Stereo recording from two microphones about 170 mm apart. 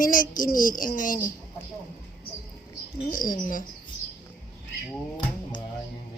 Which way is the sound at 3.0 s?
55° left (ahead or behind).